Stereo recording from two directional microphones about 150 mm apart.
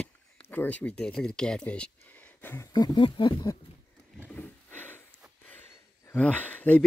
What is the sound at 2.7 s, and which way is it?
Speech, 25° left (ahead or behind).